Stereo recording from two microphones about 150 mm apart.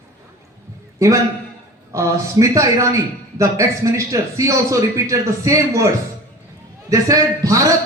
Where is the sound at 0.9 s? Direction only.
20° right (ahead or behind).